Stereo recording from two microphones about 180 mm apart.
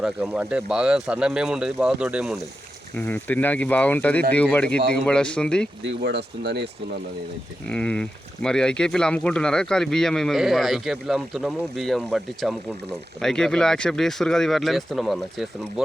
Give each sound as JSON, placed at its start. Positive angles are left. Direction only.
{"t": 0.0, "sound": "speech", "side_deg": -5}
{"t": 3.0, "sound": "speech", "side_deg": 10}
{"t": 5.8, "sound": "speech", "side_deg": -65}
{"t": 7.7, "sound": "speech", "side_deg": 5}